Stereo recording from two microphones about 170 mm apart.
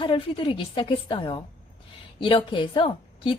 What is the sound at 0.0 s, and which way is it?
A woman's voice, 30° left (ahead or behind).